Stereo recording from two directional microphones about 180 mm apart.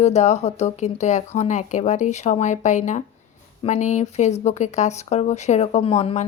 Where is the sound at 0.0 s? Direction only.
40° left (ahead or behind).